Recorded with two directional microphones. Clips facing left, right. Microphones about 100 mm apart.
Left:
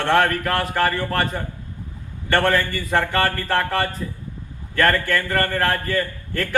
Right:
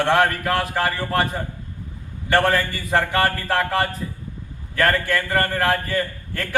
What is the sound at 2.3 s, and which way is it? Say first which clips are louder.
A man's voice: even; 10° right (ahead or behind).